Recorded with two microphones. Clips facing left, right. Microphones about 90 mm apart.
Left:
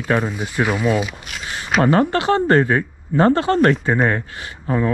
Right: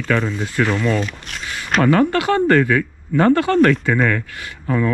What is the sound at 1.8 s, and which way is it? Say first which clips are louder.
Speech: right 1 dB; 25° left (ahead or behind).